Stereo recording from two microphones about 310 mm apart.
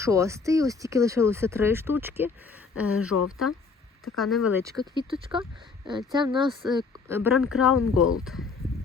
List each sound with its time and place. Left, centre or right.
0.0 s speech: centre
2.8 s speech: left
4.2 s speech: centre
7.7 s speech: left
8.2 s speech: centre